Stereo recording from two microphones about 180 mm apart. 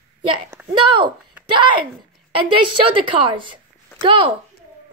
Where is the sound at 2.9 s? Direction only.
30° right (ahead or behind).